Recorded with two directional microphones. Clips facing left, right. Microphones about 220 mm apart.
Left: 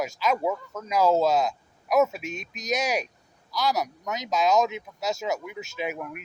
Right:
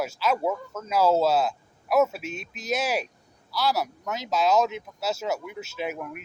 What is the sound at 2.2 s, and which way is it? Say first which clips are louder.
Speech: even; 45° left (ahead or behind).